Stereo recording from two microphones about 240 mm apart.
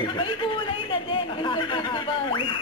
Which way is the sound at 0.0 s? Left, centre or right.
Centre.